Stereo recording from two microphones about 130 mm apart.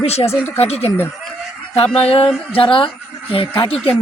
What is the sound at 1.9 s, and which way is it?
Speech, 50° left (ahead or behind).